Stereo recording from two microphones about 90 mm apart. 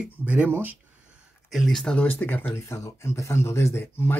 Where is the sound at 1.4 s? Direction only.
Centre (ahead or behind).